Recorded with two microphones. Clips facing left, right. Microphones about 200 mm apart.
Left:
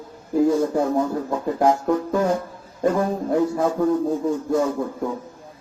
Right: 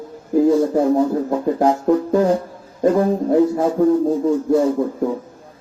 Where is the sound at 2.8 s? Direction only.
30° right (ahead or behind).